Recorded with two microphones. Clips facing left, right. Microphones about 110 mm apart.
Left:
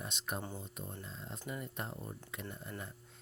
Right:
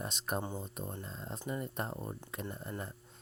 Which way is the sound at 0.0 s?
40° right (ahead or behind).